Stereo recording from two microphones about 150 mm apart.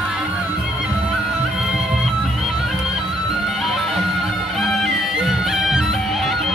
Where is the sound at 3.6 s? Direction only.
Centre (ahead or behind).